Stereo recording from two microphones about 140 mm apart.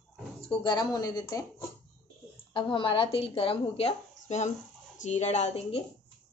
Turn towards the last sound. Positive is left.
turn(degrees=50)  # may be behind; listen again after turning